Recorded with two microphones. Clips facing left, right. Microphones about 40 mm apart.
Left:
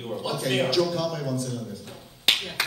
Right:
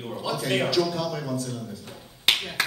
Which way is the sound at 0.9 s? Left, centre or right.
Right.